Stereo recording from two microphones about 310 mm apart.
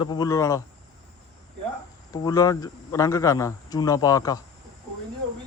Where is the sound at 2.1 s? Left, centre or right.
Centre.